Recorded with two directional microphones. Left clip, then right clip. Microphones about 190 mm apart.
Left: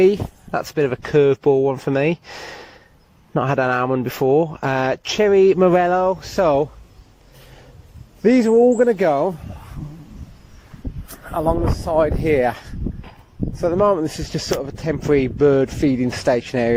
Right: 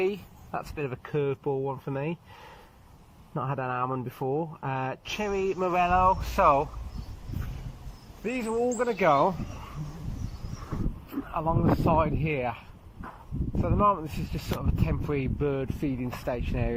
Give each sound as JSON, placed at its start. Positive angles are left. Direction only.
{"t": 0.0, "sound": "speech", "side_deg": 35}
{"t": 3.3, "sound": "speech", "side_deg": 50}
{"t": 8.2, "sound": "speech", "side_deg": 35}
{"t": 8.9, "sound": "speech", "side_deg": 25}
{"t": 11.3, "sound": "speech", "side_deg": 35}